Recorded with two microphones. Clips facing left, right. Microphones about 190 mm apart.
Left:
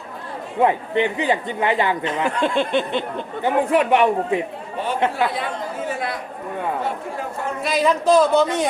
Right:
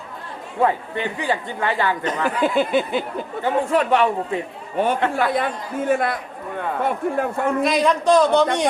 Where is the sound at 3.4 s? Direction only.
15° left (ahead or behind).